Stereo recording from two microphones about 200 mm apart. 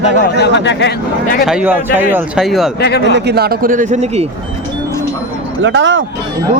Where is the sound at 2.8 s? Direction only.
55° left (ahead or behind).